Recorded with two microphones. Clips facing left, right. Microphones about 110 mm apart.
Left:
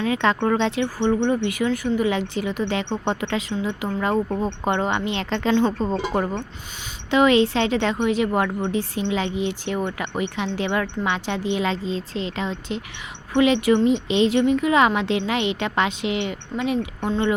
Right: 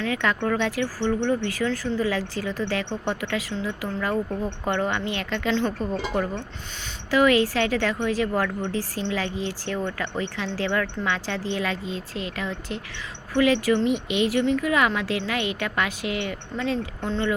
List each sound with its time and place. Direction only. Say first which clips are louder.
0.0 s speech: left 4 dB; 25° left (ahead or behind)